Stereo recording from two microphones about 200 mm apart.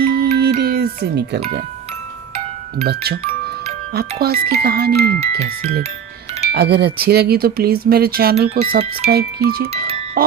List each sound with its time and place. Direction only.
0.0 s music: 50° right (ahead or behind)
2.8 s speech: 55° right (ahead or behind)
6.5 s speech: 55° right (ahead or behind)
8.4 s speech: 30° right (ahead or behind)
9.0 s speech: 50° right (ahead or behind)
10.2 s music: 50° right (ahead or behind)